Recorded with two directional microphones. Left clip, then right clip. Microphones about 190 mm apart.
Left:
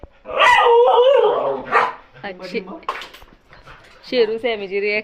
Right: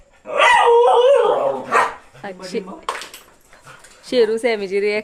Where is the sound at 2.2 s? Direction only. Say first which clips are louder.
Right 1 dB; 20° right (ahead or behind).